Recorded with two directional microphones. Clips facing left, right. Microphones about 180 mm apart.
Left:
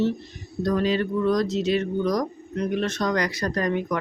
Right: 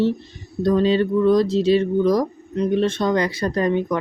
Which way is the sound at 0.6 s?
25° right (ahead or behind).